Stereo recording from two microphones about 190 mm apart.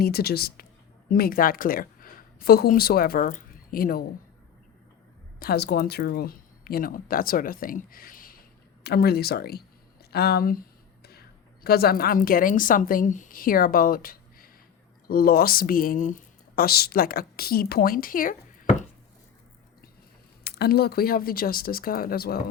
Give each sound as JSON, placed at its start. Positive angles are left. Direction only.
{"t": 0.0, "sound": "speech", "side_deg": 55}
{"t": 5.4, "sound": "speech", "side_deg": 55}
{"t": 20.4, "sound": "speech", "side_deg": 55}